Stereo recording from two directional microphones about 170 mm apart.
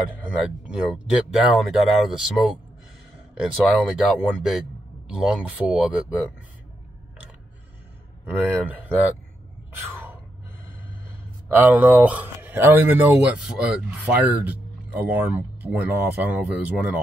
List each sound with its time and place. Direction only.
0.7 s a man's voice: 5° right (ahead or behind)
8.3 s speech: 10° right (ahead or behind)
11.5 s speech: 10° right (ahead or behind)